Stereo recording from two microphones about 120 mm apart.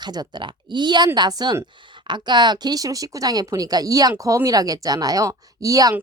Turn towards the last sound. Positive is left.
turn(degrees=-30)  # may be behind; listen again after turning